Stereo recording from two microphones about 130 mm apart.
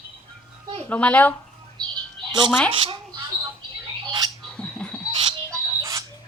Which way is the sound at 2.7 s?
45° right (ahead or behind).